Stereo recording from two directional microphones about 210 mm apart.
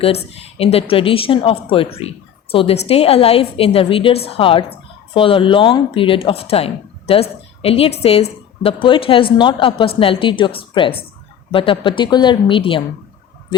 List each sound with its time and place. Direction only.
0.0 s a woman's voice: 30° left (ahead or behind)